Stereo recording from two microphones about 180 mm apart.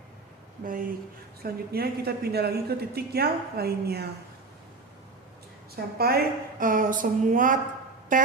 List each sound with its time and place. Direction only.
0.6 s a woman's voice: 50° right (ahead or behind)
5.7 s a woman's voice: 60° right (ahead or behind)